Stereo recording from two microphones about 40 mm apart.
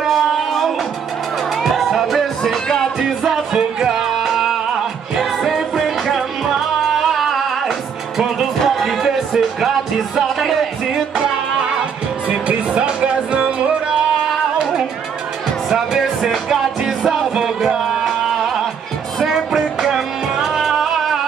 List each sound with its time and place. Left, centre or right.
0.0 s a sound: centre
1.6 s music: centre
2.4 s music: centre
3.0 s music: centre
8.2 s music: centre
8.7 s music: centre
12.3 s music: right; by 21.0 s centre